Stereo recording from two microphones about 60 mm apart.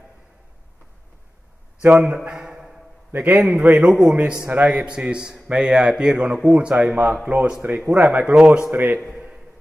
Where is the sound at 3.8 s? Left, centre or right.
Centre.